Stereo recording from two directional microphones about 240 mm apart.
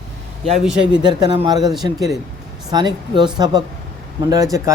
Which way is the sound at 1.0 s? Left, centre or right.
Centre.